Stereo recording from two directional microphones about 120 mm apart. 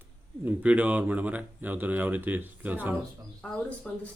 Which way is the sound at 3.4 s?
5° left (ahead or behind).